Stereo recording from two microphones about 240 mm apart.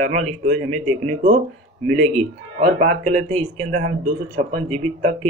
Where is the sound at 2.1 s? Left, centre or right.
Right.